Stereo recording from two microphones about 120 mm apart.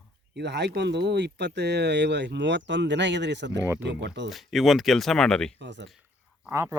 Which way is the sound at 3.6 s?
20° right (ahead or behind).